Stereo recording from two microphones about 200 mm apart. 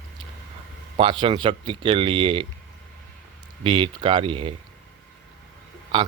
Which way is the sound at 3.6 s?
25° right (ahead or behind).